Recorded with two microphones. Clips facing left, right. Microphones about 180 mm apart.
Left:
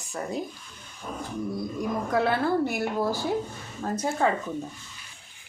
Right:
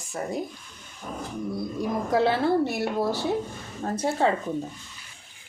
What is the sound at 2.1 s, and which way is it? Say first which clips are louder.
A woman's voice: right 3 dB; 30° right (ahead or behind).